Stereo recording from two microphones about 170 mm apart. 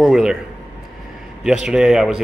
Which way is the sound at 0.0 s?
5° right (ahead or behind).